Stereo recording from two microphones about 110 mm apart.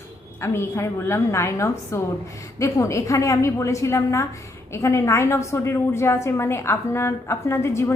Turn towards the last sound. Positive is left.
turn(degrees=25)  # may be behind; listen again after turning